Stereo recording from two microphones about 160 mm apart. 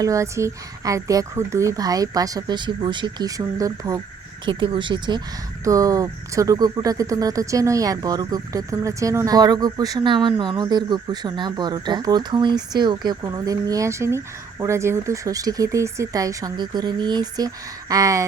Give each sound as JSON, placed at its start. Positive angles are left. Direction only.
{"t": 0.0, "sound": "speech", "side_deg": -20}